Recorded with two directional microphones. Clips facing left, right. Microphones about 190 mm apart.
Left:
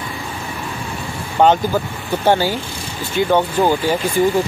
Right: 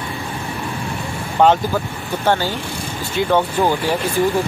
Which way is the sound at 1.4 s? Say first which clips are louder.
Even; centre (ahead or behind).